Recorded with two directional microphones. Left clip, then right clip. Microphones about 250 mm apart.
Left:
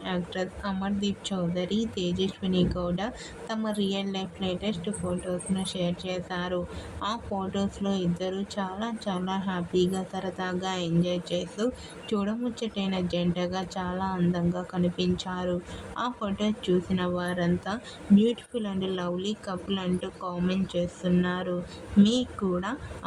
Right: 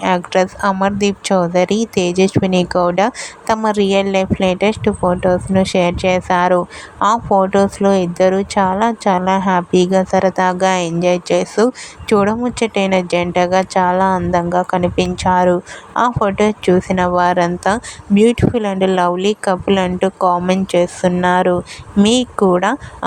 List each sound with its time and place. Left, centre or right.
0.0 s speech: right